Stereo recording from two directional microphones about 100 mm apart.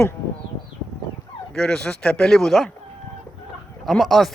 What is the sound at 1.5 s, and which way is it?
Speech, 5° left (ahead or behind).